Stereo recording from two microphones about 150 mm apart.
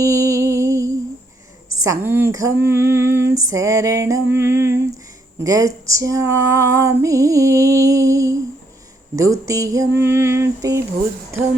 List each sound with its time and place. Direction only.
0.0 s music: 20° right (ahead or behind)
1.8 s female singing: 20° right (ahead or behind)